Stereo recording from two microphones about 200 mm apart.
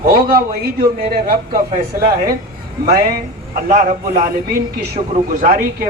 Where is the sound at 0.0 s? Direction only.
45° right (ahead or behind).